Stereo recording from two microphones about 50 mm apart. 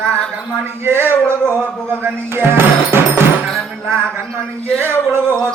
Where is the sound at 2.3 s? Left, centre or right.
Right.